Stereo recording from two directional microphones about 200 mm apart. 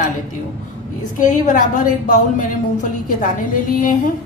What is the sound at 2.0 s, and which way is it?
A woman's voice, 40° left (ahead or behind).